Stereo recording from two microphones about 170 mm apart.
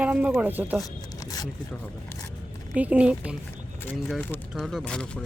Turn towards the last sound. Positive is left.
turn(degrees=5)  # may be behind; listen again after turning